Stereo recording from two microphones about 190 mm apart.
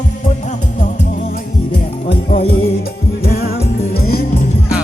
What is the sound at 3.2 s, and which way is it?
Music, 50° left (ahead or behind).